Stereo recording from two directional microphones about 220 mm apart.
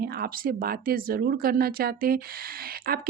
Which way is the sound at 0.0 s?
45° right (ahead or behind).